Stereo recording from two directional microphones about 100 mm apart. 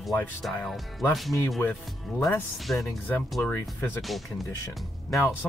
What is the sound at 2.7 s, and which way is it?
Speech, 5° left (ahead or behind).